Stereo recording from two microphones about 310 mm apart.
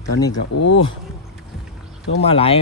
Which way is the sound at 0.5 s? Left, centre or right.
Left.